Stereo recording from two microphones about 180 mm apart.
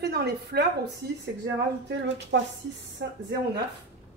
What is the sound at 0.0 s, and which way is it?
A woman's voice, 65° right (ahead or behind).